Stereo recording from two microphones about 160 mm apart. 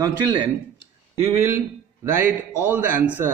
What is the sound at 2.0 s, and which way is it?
A man's voice, 15° right (ahead or behind).